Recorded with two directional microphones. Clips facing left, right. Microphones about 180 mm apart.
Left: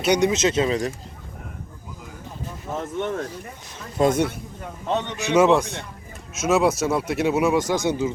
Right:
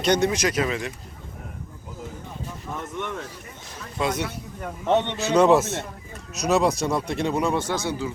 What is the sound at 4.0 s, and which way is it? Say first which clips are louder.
Speech: left 7 dB; 50° left (ahead or behind).